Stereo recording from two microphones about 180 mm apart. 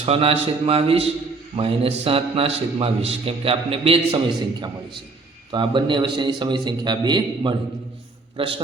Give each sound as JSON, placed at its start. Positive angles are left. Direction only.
{"t": 0.0, "sound": "a man's voice", "side_deg": -30}
{"t": 5.5, "sound": "a man's voice", "side_deg": -25}